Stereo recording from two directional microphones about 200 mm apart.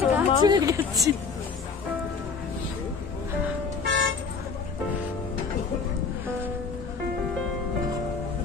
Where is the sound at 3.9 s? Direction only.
65° right (ahead or behind).